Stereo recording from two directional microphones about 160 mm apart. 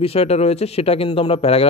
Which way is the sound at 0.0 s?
40° left (ahead or behind).